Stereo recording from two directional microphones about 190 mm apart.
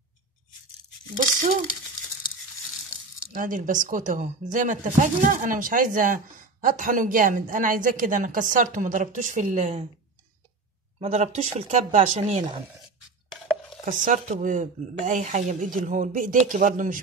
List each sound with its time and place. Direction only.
1.1 s speech: 45° right (ahead or behind)
3.3 s speech: 45° right (ahead or behind)
11.0 s speech: 35° right (ahead or behind)
13.3 s chopping: 5° left (ahead or behind)
13.8 s speech: 40° right (ahead or behind)